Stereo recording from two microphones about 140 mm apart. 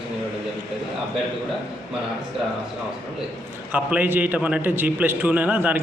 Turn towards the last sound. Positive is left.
turn(degrees=-10)  # may be behind; listen again after turning